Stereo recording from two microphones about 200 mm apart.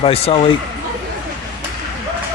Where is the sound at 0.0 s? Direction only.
30° left (ahead or behind).